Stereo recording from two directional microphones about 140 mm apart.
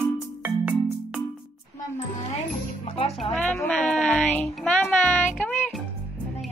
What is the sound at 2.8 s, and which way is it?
Music, 45° left (ahead or behind).